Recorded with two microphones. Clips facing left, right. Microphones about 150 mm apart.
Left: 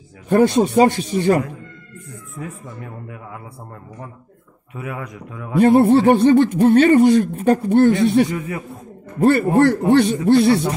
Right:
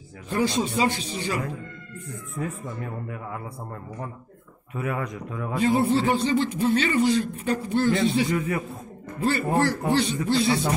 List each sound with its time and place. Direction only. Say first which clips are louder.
0.3 s a man's voice: left 10 dB; 55° left (ahead or behind)
2.8 s speech: right 1 dB; 10° left (ahead or behind)
4.7 s speech: right 1 dB; 10° left (ahead or behind)
5.6 s speech: left 10 dB; 60° left (ahead or behind)
8.3 s speech: even; 15° left (ahead or behind)
9.2 s speech: left 9 dB; 55° left (ahead or behind)